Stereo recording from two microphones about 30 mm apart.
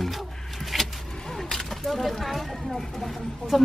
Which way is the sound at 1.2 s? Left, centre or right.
Centre.